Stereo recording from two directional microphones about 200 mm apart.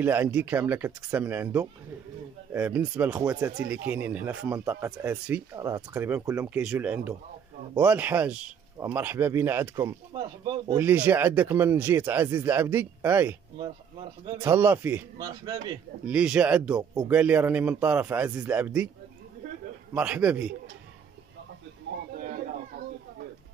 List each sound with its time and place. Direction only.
0.0 s speech: 10° right (ahead or behind)
10.8 s speech: 10° right (ahead or behind)
14.4 s speech: 10° right (ahead or behind)
16.1 s speech: 5° right (ahead or behind)
19.9 s speech: 5° right (ahead or behind)
21.9 s a sound: 60° right (ahead or behind)